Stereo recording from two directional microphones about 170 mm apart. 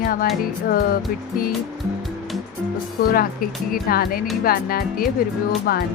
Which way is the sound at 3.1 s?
60° left (ahead or behind).